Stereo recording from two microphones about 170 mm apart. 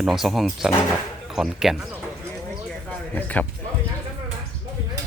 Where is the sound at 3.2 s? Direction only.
10° left (ahead or behind).